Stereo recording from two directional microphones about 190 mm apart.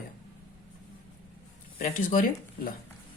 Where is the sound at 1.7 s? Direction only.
40° left (ahead or behind).